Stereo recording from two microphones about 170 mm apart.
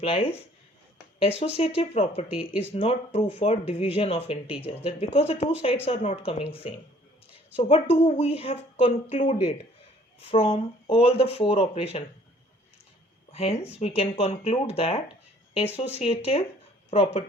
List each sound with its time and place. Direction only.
0.0 s speech: 35° left (ahead or behind)
10.2 s speech: 35° left (ahead or behind)
13.3 s speech: 35° left (ahead or behind)